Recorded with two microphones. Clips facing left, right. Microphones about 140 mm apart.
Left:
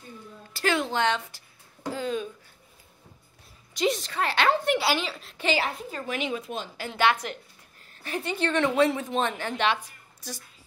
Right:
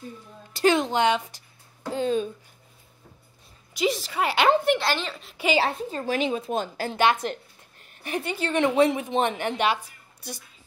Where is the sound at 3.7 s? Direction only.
5° right (ahead or behind).